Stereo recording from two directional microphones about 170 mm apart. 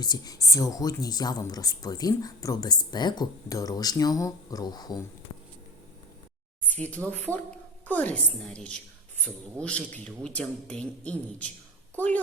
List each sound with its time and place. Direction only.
0.0 s speech: 25° left (ahead or behind)
7.3 s a woman's voice: 10° left (ahead or behind)